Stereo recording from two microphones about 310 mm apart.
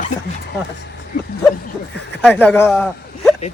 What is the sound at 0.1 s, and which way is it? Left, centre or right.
Speech, left.